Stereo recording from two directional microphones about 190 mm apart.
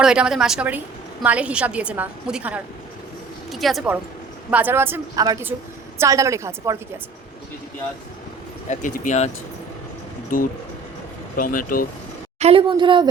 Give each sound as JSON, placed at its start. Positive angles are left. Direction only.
{"t": 0.0, "sound": "a woman's voice", "side_deg": -5}
{"t": 4.5, "sound": "a woman's voice", "side_deg": -10}
{"t": 8.7, "sound": "speech", "side_deg": 40}
{"t": 11.3, "sound": "speech", "side_deg": 45}
{"t": 12.4, "sound": "a woman's voice", "side_deg": -30}